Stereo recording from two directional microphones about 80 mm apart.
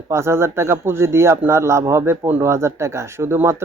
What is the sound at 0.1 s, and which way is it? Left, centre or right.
Speech, right.